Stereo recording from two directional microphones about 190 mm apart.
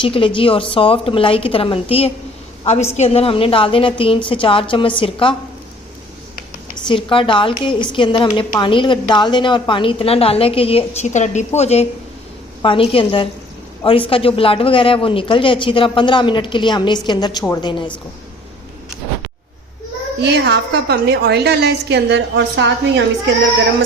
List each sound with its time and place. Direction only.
0.0 s a woman's voice: 25° left (ahead or behind)
6.8 s a woman's voice: 25° left (ahead or behind)
20.3 s a woman's voice: 65° right (ahead or behind)